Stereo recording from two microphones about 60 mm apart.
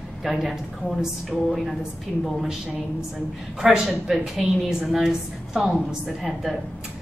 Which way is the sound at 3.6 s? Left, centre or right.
Centre.